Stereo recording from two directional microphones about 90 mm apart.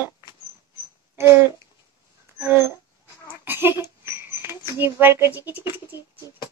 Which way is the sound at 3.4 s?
25° right (ahead or behind).